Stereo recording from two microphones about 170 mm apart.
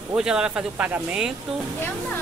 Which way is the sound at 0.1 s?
5° right (ahead or behind).